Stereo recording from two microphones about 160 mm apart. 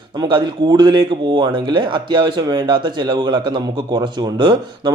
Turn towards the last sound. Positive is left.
turn(degrees=-25)  # may be behind; listen again after turning